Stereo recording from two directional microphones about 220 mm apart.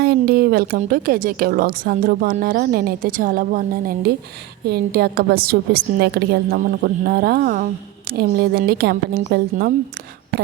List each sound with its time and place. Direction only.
0.0 s a woman's voice: 45° right (ahead or behind)